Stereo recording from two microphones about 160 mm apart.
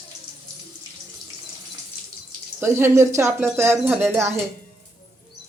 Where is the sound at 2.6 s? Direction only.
15° right (ahead or behind).